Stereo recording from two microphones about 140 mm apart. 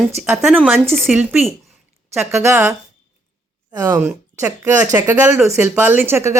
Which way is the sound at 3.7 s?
15° right (ahead or behind).